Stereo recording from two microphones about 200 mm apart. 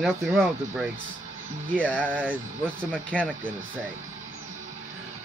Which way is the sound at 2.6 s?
5° left (ahead or behind).